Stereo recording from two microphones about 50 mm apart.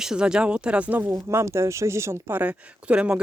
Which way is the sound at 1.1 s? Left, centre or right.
Right.